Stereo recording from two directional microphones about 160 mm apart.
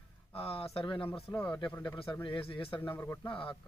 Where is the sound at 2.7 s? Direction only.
15° left (ahead or behind).